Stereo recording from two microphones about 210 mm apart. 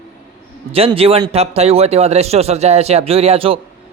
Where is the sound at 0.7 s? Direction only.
25° right (ahead or behind).